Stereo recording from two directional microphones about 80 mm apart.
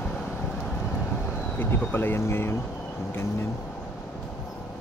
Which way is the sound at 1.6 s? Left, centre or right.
Left.